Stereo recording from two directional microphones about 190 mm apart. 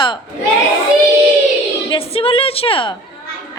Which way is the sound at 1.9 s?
30° left (ahead or behind).